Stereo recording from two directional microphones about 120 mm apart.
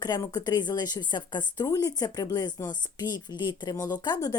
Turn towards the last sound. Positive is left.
turn(degrees=35)  # may be behind; listen again after turning